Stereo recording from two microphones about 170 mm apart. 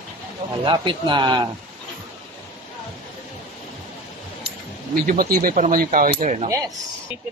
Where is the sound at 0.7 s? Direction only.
30° right (ahead or behind).